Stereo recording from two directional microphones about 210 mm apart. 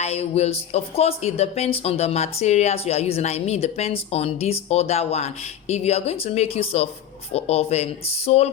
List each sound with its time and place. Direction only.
0.0 s speech: 30° left (ahead or behind)